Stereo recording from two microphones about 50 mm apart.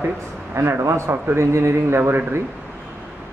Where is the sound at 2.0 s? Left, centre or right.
Right.